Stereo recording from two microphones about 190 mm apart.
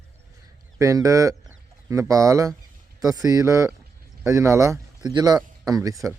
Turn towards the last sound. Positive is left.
turn(degrees=-20)  # may be behind; listen again after turning